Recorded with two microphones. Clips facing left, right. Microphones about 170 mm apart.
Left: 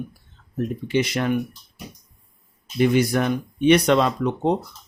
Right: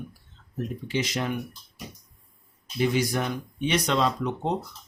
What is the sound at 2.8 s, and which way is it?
Speech, 60° left (ahead or behind).